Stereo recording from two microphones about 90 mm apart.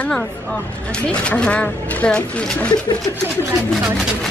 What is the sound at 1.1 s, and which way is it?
Speech, 10° left (ahead or behind).